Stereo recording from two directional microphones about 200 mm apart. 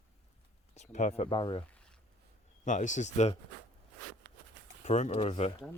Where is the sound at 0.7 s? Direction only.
35° left (ahead or behind).